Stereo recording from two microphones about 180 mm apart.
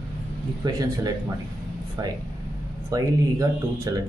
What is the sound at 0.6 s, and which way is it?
Speech, 20° right (ahead or behind).